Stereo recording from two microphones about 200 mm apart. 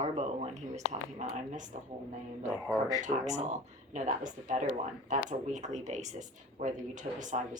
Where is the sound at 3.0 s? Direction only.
35° right (ahead or behind).